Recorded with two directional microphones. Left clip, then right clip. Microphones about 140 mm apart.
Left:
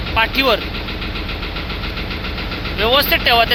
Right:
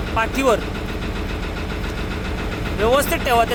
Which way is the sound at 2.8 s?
15° right (ahead or behind).